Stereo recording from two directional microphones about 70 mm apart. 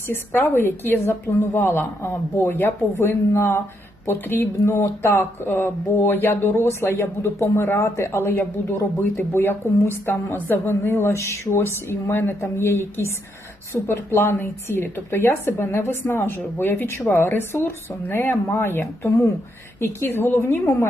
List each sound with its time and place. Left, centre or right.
0.1 s speech: left